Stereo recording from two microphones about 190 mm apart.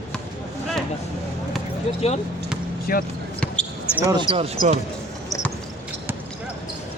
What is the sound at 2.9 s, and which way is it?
Speech, 50° left (ahead or behind).